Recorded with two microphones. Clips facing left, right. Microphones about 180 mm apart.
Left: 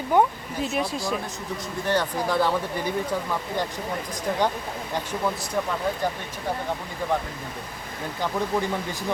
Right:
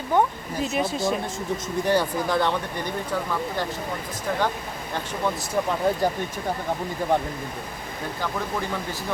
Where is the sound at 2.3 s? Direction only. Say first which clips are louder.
Even; 5° left (ahead or behind).